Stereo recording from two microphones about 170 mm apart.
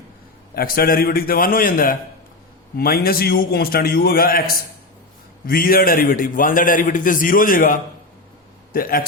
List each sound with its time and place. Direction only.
0.5 s a man's voice: 60° left (ahead or behind)
5.5 s a man's voice: 60° left (ahead or behind)